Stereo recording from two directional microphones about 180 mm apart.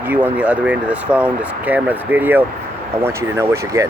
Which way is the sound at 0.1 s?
10° right (ahead or behind).